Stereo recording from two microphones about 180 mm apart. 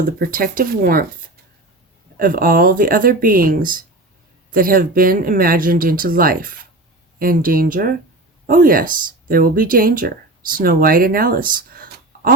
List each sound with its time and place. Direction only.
0.2 s speech: 55° right (ahead or behind)
2.1 s speech: 50° right (ahead or behind)